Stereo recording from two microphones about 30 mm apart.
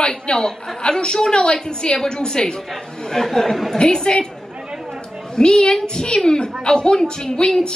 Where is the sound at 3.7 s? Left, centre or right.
Left.